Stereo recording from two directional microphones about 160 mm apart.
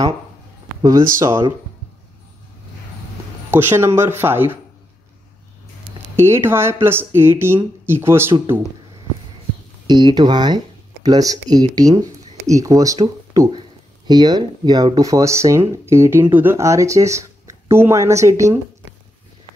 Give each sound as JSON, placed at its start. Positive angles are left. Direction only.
{"t": 3.4, "sound": "speech", "side_deg": -15}
{"t": 6.1, "sound": "speech", "side_deg": -15}
{"t": 9.8, "sound": "speech", "side_deg": -25}